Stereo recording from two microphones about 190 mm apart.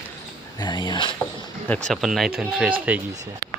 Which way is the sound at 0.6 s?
20° left (ahead or behind).